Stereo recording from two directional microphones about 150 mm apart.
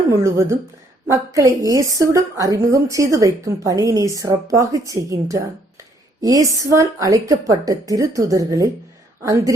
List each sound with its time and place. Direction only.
0.1 s a woman's voice: 20° right (ahead or behind)